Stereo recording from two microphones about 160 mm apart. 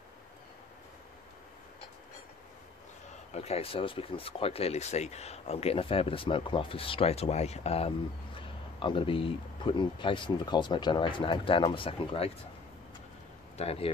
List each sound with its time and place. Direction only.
3.3 s speech: 40° left (ahead or behind)
13.6 s speech: 40° left (ahead or behind)